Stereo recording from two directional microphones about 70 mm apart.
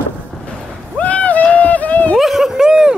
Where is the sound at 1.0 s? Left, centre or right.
Centre.